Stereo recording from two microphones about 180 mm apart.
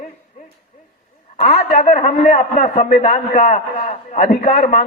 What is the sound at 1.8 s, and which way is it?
A man's voice, 35° left (ahead or behind).